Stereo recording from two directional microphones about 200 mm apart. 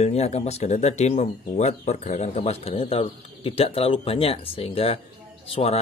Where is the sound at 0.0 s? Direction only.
30° left (ahead or behind).